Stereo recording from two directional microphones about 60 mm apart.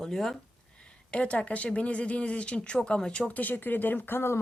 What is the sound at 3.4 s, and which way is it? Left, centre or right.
Speech, left.